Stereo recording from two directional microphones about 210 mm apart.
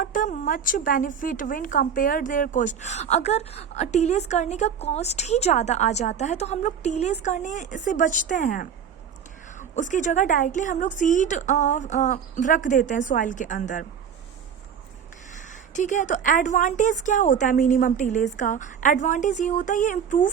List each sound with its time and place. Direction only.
0.0 s a woman's voice: 40° left (ahead or behind)
15.7 s a woman's voice: 35° left (ahead or behind)